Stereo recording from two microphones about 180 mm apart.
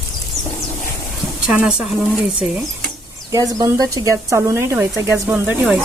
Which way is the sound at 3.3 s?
20° right (ahead or behind).